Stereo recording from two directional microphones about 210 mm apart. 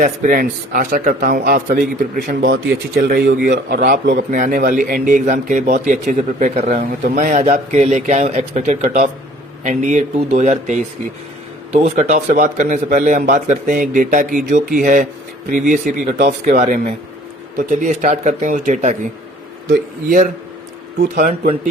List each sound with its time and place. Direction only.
0.0 s a man's voice: 40° right (ahead or behind)
20.1 s speech: 40° right (ahead or behind)